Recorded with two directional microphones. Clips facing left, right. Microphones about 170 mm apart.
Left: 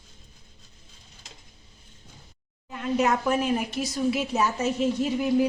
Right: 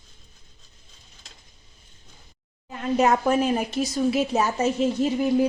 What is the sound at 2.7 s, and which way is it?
A woman's voice, 40° right (ahead or behind).